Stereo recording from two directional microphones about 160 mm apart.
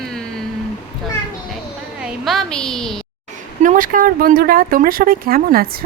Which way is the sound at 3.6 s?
55° right (ahead or behind).